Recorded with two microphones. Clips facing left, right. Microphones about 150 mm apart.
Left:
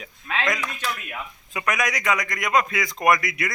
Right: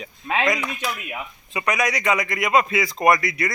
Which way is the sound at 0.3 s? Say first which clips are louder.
Right 5 dB; 25° right (ahead or behind).